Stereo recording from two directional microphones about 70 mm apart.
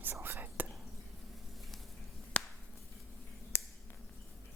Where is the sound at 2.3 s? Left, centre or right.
Centre.